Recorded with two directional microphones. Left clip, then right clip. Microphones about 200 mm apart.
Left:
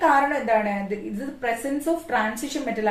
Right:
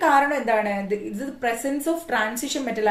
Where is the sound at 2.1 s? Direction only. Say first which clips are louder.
Even; 45° right (ahead or behind).